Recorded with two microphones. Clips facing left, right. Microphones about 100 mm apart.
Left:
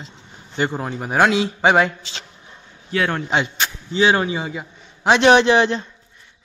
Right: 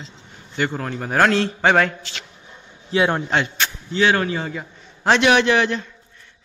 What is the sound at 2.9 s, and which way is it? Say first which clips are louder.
Speech: right 3 dB; 20° right (ahead or behind).